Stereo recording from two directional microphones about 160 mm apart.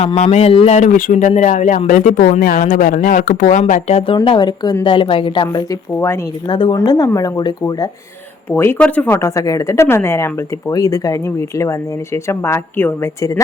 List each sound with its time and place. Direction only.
0.0 s speech: 40° left (ahead or behind)
6.7 s speech: 20° left (ahead or behind)
8.4 s speech: 15° left (ahead or behind)